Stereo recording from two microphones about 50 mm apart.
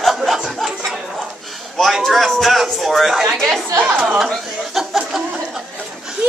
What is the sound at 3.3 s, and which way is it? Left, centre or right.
Speech, centre.